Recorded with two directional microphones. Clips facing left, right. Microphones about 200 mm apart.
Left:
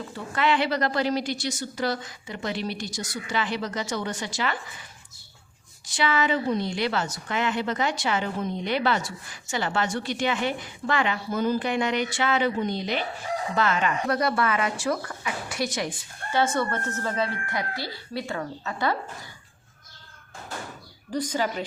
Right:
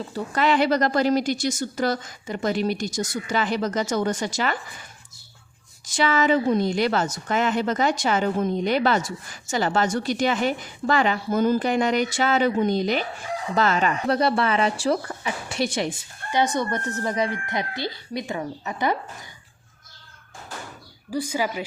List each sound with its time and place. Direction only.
0.1 s speech: 40° right (ahead or behind)
5.8 s speech: 45° right (ahead or behind); by 16.0 s 25° right (ahead or behind)
16.3 s speech: 15° right (ahead or behind)
21.1 s speech: 10° right (ahead or behind)